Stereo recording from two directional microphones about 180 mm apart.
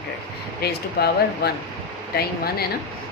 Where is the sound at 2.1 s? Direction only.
60° left (ahead or behind).